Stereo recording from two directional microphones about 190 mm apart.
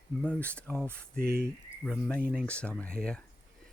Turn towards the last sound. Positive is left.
turn(degrees=5)  # may be behind; listen again after turning